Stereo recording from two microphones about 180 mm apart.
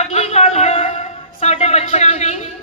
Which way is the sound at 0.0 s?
35° left (ahead or behind).